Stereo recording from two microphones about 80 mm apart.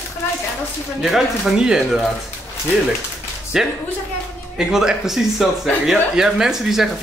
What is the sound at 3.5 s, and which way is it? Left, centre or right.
Speech, centre.